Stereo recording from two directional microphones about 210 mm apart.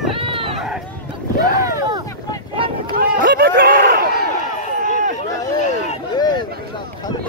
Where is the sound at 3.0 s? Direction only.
45° right (ahead or behind).